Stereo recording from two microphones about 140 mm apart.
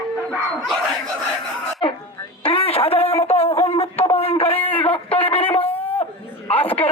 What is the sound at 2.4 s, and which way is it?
Telephone, 40° left (ahead or behind).